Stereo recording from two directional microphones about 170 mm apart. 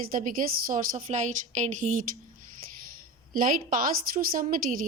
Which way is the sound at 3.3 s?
55° right (ahead or behind).